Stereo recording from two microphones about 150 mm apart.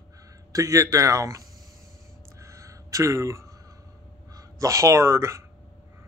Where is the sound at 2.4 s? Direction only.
20° right (ahead or behind).